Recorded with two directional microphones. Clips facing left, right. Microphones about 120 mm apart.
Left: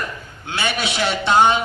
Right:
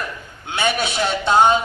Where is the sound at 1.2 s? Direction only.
40° right (ahead or behind).